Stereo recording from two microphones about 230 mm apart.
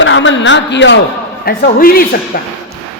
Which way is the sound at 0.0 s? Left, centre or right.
Left.